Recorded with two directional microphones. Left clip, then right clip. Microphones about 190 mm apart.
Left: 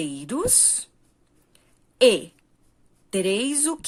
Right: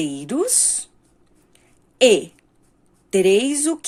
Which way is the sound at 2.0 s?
35° left (ahead or behind).